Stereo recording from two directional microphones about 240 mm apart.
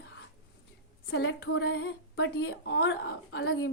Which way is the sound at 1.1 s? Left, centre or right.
Left.